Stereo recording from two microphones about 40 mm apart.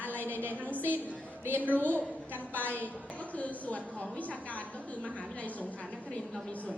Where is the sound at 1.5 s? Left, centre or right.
Left.